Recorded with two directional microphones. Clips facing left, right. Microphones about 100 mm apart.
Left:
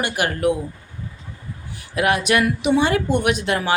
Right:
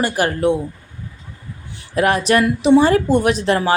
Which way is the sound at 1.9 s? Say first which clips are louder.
Right 3 dB; 35° right (ahead or behind).